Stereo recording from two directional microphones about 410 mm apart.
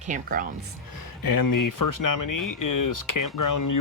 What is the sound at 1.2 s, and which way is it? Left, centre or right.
Speech, left.